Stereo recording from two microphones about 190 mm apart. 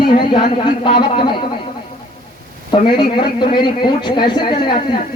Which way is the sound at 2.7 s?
25° left (ahead or behind).